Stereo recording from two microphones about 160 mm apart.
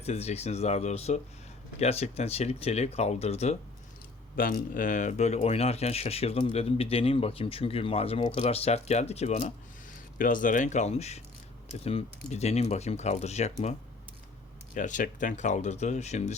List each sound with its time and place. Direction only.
0.0 s speech: 40° left (ahead or behind)
4.4 s speech: 60° left (ahead or behind); by 9.5 s 45° left (ahead or behind)
9.9 s speech: 55° left (ahead or behind)
14.8 s speech: 55° left (ahead or behind)